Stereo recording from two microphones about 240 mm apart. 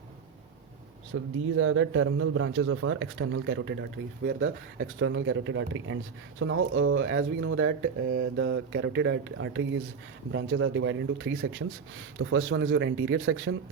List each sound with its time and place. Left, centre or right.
1.1 s a man's voice: right